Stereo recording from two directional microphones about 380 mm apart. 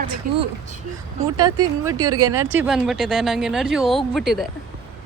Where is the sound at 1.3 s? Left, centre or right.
Centre.